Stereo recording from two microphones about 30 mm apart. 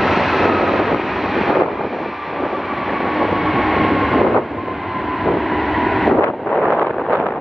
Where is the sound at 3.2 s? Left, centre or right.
Centre.